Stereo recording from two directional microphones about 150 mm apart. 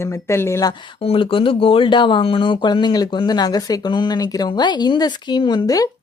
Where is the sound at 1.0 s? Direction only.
35° left (ahead or behind).